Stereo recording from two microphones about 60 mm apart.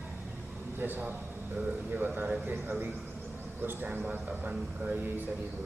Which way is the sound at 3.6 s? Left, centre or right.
Right.